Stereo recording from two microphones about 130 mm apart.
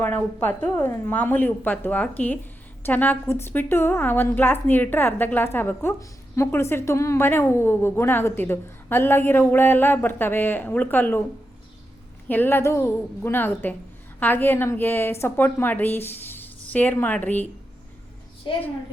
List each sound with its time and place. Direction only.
0.0 s a woman's voice: 15° left (ahead or behind)
12.3 s a woman's voice: 15° left (ahead or behind)
18.5 s a child's voice: 35° left (ahead or behind)